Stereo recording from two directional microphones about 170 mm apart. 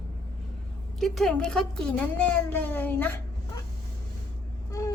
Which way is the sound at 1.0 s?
Centre (ahead or behind).